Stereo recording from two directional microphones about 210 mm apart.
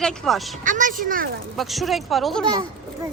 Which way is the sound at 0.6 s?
40° right (ahead or behind).